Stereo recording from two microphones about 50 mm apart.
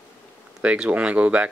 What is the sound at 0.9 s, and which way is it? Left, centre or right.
Speech, right.